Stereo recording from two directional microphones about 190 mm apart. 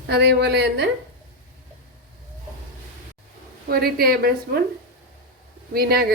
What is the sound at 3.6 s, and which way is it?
Speech, 55° right (ahead or behind).